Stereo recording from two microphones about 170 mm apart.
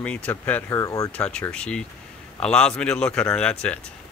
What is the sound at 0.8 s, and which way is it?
Speech, 20° left (ahead or behind).